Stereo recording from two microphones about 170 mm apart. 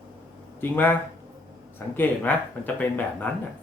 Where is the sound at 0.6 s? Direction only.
10° left (ahead or behind).